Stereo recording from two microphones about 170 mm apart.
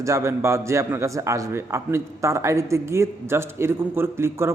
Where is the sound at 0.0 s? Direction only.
15° right (ahead or behind).